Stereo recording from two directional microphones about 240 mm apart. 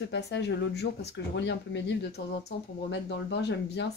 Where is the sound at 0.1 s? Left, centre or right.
Left.